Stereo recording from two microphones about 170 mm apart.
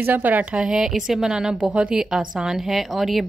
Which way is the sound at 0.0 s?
10° right (ahead or behind).